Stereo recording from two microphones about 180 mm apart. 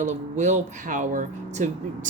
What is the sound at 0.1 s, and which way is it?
Speech, 40° right (ahead or behind).